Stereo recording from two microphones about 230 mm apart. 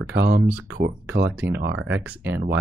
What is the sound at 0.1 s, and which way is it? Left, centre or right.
Speech, right.